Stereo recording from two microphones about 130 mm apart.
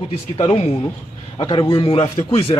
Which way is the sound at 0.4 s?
50° left (ahead or behind).